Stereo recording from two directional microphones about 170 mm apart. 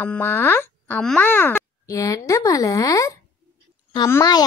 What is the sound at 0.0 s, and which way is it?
Speech, 10° left (ahead or behind).